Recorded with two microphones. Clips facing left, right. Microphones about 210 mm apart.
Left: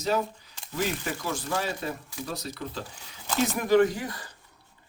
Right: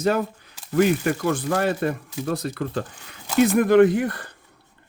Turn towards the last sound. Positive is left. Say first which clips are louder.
# right 8 dB
turn(degrees=-60)  # may be behind; listen again after turning